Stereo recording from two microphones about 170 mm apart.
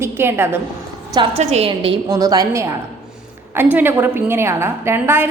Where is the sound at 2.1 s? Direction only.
20° right (ahead or behind).